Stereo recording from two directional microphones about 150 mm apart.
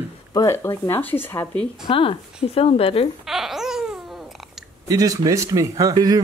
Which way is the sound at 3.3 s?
Centre (ahead or behind).